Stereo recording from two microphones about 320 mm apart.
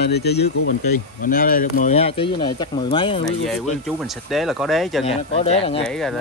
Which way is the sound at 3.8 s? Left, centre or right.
Centre.